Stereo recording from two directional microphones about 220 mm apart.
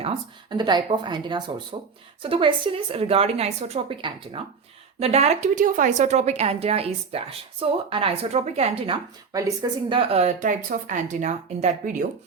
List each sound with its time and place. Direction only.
0.5 s a woman's voice: 20° right (ahead or behind)
9.3 s speech: 15° right (ahead or behind); by 12.0 s 35° right (ahead or behind)